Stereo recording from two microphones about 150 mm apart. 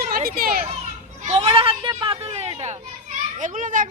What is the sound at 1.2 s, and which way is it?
Children playing, 45° right (ahead or behind).